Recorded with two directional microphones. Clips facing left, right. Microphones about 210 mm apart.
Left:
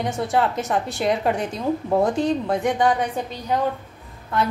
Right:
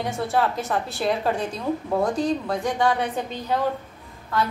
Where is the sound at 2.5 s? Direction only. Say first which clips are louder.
Left 3 dB; 20° left (ahead or behind).